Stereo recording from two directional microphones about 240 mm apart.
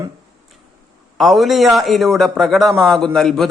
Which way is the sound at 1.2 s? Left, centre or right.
Centre.